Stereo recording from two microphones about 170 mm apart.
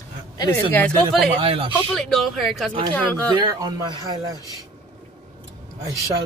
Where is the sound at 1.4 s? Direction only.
30° right (ahead or behind).